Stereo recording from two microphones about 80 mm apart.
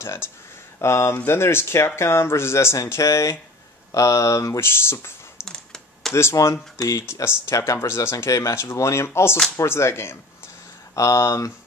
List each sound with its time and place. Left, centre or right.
0.0 s speech: left
5.5 s computer keyboard: centre
6.3 s speech: left